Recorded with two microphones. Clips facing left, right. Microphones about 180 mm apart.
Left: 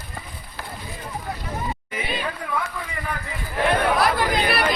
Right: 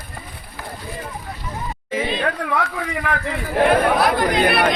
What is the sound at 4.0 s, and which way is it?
Chatter, centre (ahead or behind).